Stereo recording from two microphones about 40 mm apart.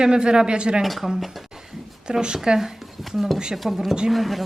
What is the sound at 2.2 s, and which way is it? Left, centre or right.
Speech, centre.